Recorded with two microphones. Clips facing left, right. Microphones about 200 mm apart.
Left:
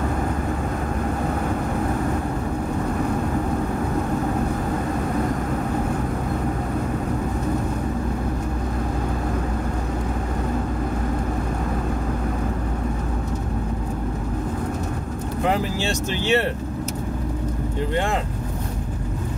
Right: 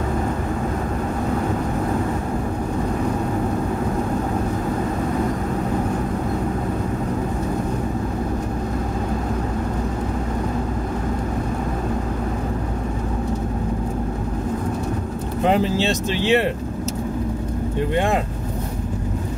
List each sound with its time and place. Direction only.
15.4 s speech: 20° right (ahead or behind)